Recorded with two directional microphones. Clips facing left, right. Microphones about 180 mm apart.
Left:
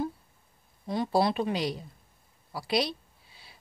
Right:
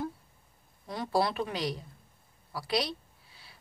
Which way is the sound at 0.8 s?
20° left (ahead or behind).